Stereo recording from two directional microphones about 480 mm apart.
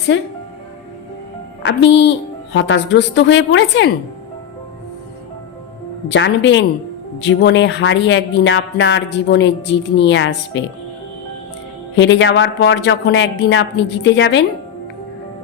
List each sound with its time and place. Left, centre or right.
0.1 s speech: left
1.6 s speech: left
6.1 s speech: left
11.9 s speech: left